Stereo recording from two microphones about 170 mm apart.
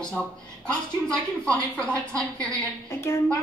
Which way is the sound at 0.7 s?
5° left (ahead or behind).